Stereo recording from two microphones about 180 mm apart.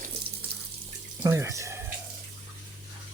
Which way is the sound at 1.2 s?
15° right (ahead or behind).